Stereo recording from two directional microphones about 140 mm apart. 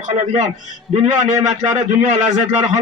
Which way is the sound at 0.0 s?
55° right (ahead or behind).